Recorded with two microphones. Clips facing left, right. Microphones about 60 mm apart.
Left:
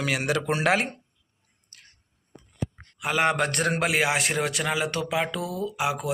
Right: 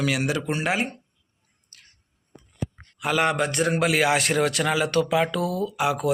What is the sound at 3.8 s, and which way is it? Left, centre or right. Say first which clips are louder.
A man's voice: right 4 dB; centre.